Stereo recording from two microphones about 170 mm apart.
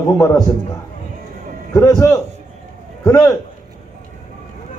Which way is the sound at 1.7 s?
20° left (ahead or behind).